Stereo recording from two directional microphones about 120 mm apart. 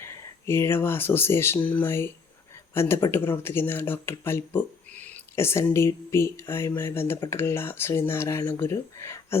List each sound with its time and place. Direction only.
0.0 s speech: 20° left (ahead or behind)